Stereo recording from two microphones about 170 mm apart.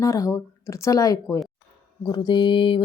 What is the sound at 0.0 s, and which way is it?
Speech, 20° left (ahead or behind).